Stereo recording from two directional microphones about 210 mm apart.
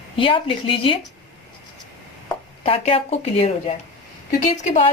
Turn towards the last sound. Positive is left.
turn(degrees=35)  # may be behind; listen again after turning